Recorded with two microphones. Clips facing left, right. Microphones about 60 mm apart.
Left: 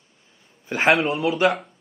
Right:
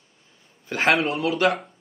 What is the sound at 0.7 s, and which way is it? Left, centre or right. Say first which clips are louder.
Speech: left 2 dB; left.